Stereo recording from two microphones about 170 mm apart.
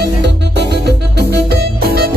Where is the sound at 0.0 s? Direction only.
80° right.